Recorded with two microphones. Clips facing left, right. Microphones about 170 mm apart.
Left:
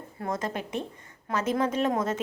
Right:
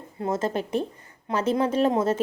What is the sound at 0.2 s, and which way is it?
A woman's voice, 30° right (ahead or behind).